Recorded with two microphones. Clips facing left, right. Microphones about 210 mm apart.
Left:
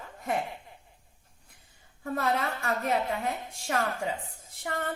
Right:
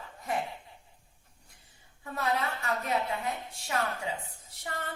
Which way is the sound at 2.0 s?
50° left (ahead or behind).